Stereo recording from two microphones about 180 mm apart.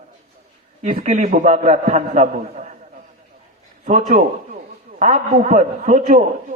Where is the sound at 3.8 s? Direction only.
40° right (ahead or behind).